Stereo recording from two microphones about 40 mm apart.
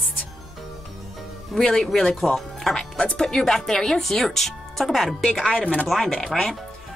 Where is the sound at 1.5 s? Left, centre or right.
Centre.